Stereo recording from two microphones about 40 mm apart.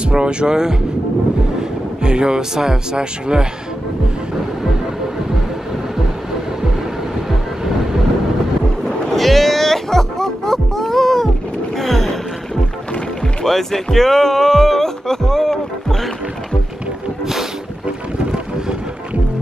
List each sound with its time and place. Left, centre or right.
0.1 s speech: right
2.0 s speech: right
7.2 s vehicle: centre
8.8 s music: centre
11.8 s gasp: centre
13.4 s speech: centre